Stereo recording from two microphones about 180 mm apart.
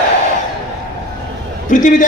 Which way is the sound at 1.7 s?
45° left (ahead or behind).